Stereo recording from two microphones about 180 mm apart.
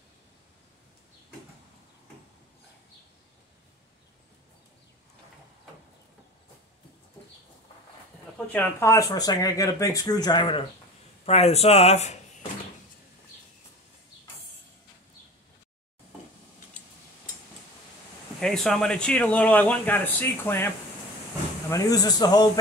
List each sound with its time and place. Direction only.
8.5 s speech: 10° left (ahead or behind)
11.2 s speech: 35° left (ahead or behind)
18.4 s speech: 5° left (ahead or behind); by 22.5 s 20° left (ahead or behind)